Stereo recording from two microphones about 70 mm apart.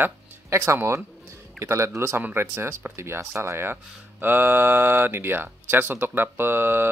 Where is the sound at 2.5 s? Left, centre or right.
Right.